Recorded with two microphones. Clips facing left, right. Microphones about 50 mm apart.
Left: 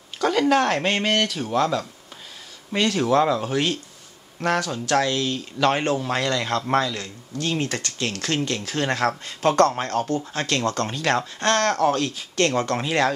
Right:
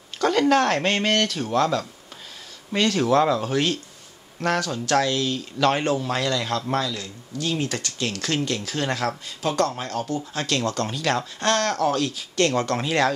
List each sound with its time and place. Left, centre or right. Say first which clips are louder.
0.2 s speech: even; centre
2.7 s a man's voice: even; centre